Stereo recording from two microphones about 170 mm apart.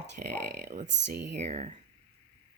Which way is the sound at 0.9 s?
90° right.